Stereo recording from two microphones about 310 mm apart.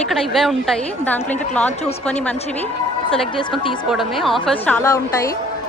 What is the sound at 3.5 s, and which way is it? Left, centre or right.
Speech, centre.